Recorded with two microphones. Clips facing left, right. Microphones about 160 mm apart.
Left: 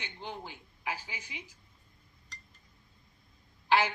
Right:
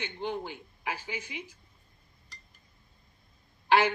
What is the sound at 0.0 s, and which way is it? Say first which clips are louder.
A woman's voice: right 8 dB; 60° right (ahead or behind).